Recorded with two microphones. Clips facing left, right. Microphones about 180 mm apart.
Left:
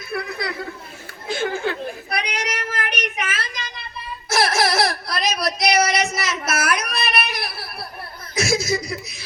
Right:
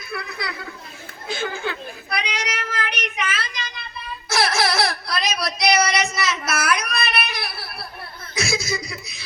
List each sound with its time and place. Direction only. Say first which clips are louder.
0.2 s a sound: left 6 dB; 50° left (ahead or behind)
1.3 s child singing: left 4 dB; 50° left (ahead or behind)
4.3 s baby cry: left 2 dB; 45° left (ahead or behind)
6.0 s child singing: even; 45° left (ahead or behind)
8.4 s chuckle: left 4 dB; 45° left (ahead or behind)
8.9 s a sound: left 6 dB; 50° left (ahead or behind)